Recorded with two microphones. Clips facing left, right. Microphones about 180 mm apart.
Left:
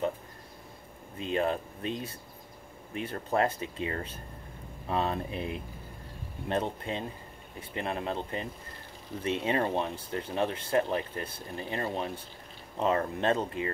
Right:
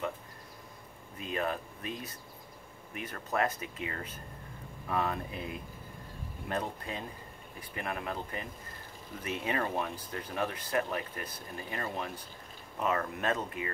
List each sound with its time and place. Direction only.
1.1 s speech: 25° left (ahead or behind)